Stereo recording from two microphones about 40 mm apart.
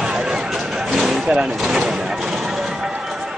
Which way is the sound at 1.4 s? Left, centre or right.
Centre.